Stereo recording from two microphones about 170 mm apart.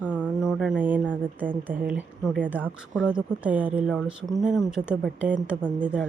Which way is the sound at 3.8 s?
5° left (ahead or behind).